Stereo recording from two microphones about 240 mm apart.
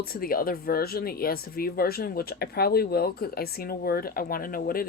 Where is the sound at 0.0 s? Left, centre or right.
Left.